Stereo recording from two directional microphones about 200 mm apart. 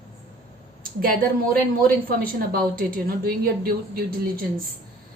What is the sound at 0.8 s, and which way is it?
A woman's voice, 45° right (ahead or behind).